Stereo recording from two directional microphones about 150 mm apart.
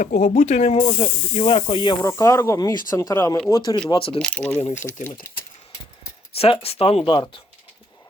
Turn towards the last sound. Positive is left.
turn(degrees=40)  # may be behind; listen again after turning